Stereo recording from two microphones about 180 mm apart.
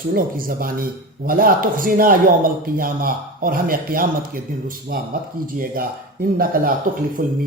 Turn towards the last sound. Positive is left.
turn(degrees=-50)  # may be behind; listen again after turning